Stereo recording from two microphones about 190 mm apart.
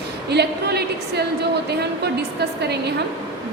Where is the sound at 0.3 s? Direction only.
60° right (ahead or behind).